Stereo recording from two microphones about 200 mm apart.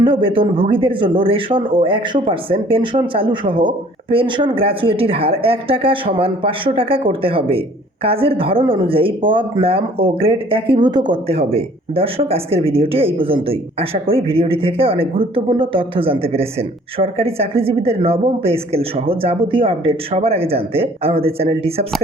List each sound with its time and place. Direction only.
0.0 s speech: 25° right (ahead or behind)